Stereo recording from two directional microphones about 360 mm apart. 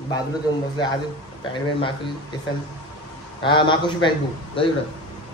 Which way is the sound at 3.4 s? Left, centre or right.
Centre.